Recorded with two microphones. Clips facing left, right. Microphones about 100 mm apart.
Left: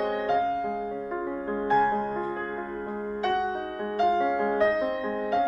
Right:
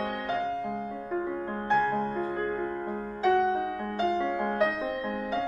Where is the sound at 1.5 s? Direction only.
15° left (ahead or behind).